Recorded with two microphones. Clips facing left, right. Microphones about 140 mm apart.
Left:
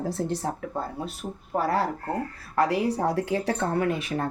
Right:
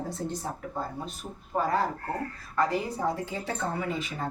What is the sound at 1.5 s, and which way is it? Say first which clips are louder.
Speech: left 2 dB; 75° left (ahead or behind).